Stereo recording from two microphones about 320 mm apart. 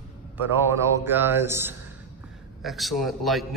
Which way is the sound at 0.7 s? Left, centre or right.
Centre.